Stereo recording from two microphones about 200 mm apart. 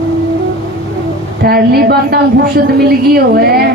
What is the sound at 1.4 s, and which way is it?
A woman's voice, 50° right (ahead or behind).